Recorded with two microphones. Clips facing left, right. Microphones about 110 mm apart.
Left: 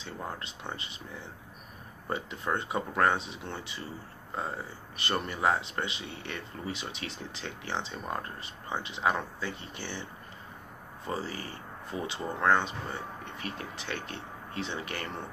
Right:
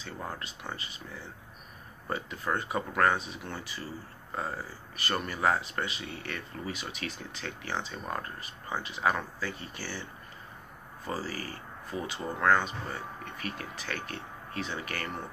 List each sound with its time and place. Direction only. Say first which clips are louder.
0.4 s speech: even; 25° left (ahead or behind)
2.0 s speech: even; 25° left (ahead or behind)
11.1 s speech: even; 25° left (ahead or behind)